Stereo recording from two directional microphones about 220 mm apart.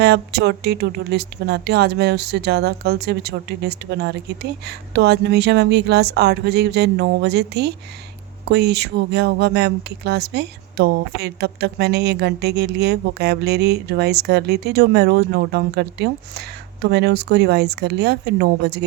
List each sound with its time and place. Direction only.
0.0 s speech: 50° right (ahead or behind)